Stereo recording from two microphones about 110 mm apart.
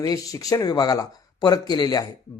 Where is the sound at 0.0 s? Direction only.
35° left (ahead or behind).